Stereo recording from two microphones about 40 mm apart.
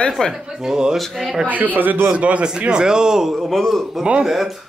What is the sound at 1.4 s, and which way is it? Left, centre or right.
Speech, right.